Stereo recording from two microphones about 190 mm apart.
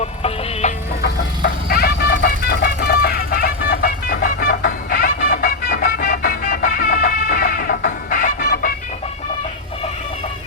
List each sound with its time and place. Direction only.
0.0 s music: 35° left (ahead or behind)
1.0 s vehicle: 55° left (ahead or behind)